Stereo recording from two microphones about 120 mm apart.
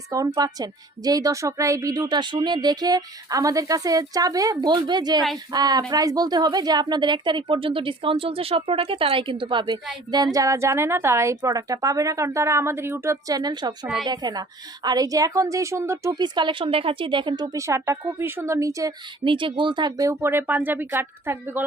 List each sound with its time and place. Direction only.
0.3 s a woman's voice: 30° right (ahead or behind)
10.3 s a woman's voice: 25° right (ahead or behind)
16.1 s a woman's voice: 40° right (ahead or behind)
17.5 s a woman's voice: 25° right (ahead or behind)
19.2 s a woman's voice: 45° right (ahead or behind); by 21.6 s 20° right (ahead or behind)